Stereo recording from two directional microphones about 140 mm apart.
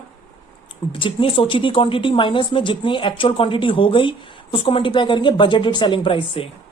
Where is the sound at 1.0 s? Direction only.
40° left (ahead or behind).